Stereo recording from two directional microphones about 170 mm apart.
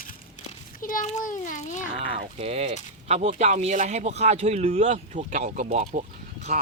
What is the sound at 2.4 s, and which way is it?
Speech, 35° right (ahead or behind).